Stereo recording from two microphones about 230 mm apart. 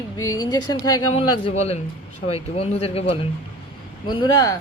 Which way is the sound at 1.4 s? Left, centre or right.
Left.